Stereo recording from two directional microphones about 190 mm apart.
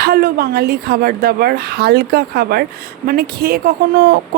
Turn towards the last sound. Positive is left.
turn(degrees=-50)  # may be behind; listen again after turning